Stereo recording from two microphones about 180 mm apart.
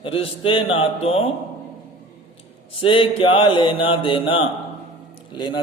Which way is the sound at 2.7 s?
30° left (ahead or behind).